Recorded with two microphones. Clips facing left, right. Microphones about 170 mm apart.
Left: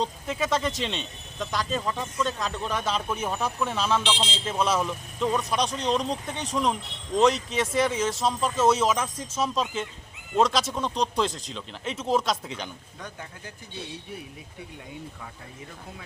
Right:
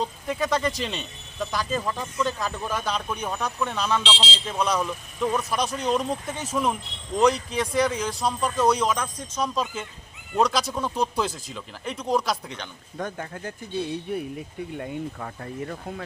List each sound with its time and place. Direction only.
0.0 s speech: centre (ahead or behind)
13.0 s speech: 50° right (ahead or behind)